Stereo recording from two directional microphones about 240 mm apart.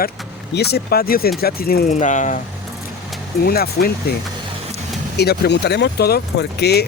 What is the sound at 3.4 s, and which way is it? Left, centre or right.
Speech, left.